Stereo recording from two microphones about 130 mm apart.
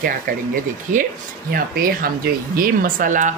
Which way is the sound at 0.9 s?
75° right (ahead or behind).